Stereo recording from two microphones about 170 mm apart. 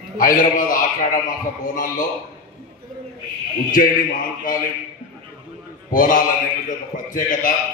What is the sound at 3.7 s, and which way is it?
Speech, 55° left (ahead or behind).